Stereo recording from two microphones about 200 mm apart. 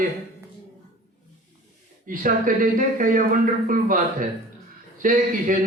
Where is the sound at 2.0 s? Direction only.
40° right (ahead or behind).